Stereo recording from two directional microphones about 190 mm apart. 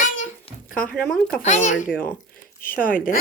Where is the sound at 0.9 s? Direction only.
5° left (ahead or behind).